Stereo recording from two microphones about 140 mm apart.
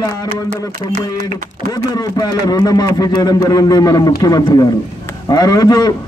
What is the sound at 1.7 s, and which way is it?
A man's voice, 25° left (ahead or behind).